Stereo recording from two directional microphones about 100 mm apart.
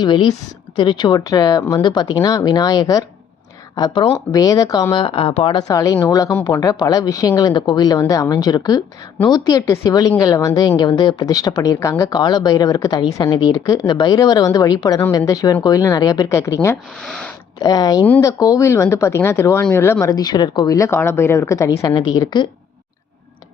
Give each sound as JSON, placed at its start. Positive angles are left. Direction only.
{"t": 0.0, "sound": "a woman's voice", "side_deg": 45}
{"t": 4.9, "sound": "speech", "side_deg": 60}
{"t": 5.5, "sound": "a woman's voice", "side_deg": 35}
{"t": 12.1, "sound": "a woman's voice", "side_deg": 45}
{"t": 16.3, "sound": "speech", "side_deg": 30}
{"t": 17.0, "sound": "speech", "side_deg": 10}
{"t": 17.6, "sound": "a woman's voice", "side_deg": 40}
{"t": 20.1, "sound": "speech", "side_deg": 40}
{"t": 20.7, "sound": "speech", "side_deg": 25}
{"t": 21.9, "sound": "speech", "side_deg": 45}